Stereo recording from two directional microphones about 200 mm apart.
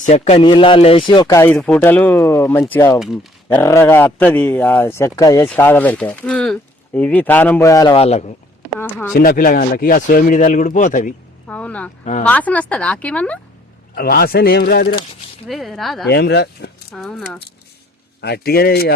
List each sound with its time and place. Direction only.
0.0 s a man's voice: 30° left (ahead or behind); by 3.0 s 10° left (ahead or behind)
3.0 s speech: centre (ahead or behind)
3.6 s a man's voice: 15° left (ahead or behind)
8.0 s speech: 30° left (ahead or behind)
9.1 s speech: 45° left (ahead or behind)
11.4 s a man's voice: 5° left (ahead or behind)
13.9 s speech: 50° left (ahead or behind)
15.4 s speech: centre (ahead or behind)
16.0 s speech: 55° left (ahead or behind)
16.9 s speech: centre (ahead or behind)
18.2 s speech: 55° left (ahead or behind)